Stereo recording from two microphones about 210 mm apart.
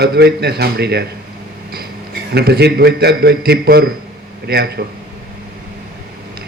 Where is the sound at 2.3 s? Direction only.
50° right (ahead or behind).